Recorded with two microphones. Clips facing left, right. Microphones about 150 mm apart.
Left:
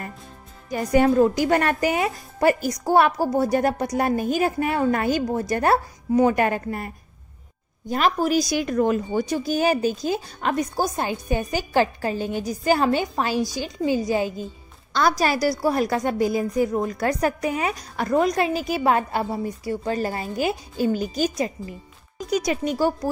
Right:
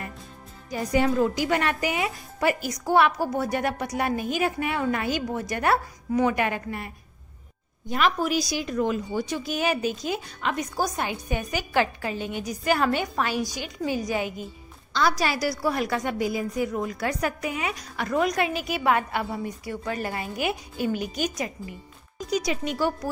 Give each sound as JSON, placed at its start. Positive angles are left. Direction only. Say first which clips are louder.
{"t": 0.7, "sound": "a woman's voice", "louder": "left 5 dB", "side_deg": 50}
{"t": 7.9, "sound": "speech", "louder": "left 3 dB", "side_deg": 40}
{"t": 9.3, "sound": "a woman's voice", "louder": "left 6 dB", "side_deg": 40}
{"t": 14.9, "sound": "a woman's voice", "louder": "left 4 dB", "side_deg": 45}
{"t": 22.3, "sound": "speech", "louder": "left 4 dB", "side_deg": 50}